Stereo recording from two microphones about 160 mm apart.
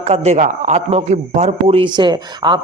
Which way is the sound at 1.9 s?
30° right (ahead or behind).